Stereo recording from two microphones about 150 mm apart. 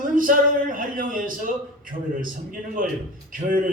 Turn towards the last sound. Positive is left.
turn(degrees=-65)  # may be behind; listen again after turning